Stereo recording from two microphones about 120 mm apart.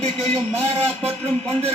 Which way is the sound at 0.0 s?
60° right (ahead or behind).